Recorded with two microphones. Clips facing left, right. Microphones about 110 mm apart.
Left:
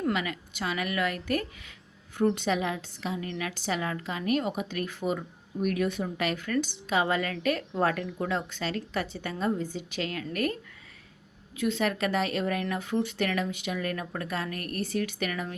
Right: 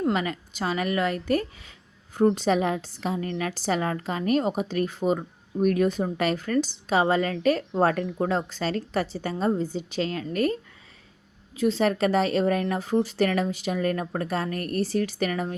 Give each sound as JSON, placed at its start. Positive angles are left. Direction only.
{"t": 0.1, "sound": "a woman's voice", "side_deg": -35}